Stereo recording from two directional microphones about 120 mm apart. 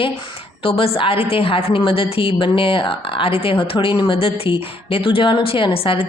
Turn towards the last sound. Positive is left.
turn(degrees=50)  # may be behind; listen again after turning